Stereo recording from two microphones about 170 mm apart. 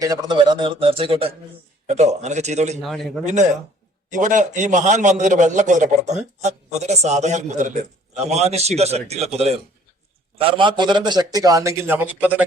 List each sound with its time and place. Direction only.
0.0 s a man's voice: 20° right (ahead or behind)
1.9 s a man's voice: 40° right (ahead or behind)
2.8 s a man's voice: centre (ahead or behind)
4.1 s a man's voice: 50° right (ahead or behind); by 12.5 s 10° right (ahead or behind)